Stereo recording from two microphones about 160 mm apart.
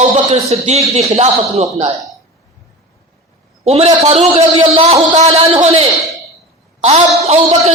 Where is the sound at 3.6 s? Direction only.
40° right (ahead or behind).